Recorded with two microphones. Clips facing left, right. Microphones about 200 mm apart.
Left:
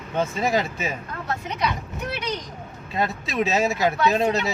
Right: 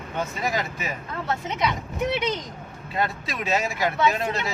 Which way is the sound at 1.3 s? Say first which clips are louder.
Right 1 dB; 25° right (ahead or behind).